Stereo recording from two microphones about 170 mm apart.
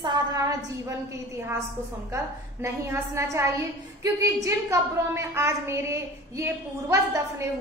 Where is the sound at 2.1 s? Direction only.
15° right (ahead or behind).